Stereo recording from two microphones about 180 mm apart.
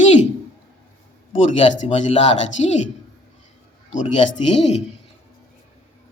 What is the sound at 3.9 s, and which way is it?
Speech, 45° left (ahead or behind).